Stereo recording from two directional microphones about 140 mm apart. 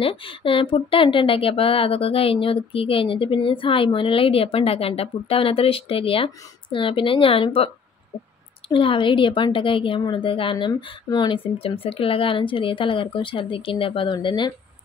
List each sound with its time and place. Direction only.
0.0 s a woman's voice: 40° left (ahead or behind)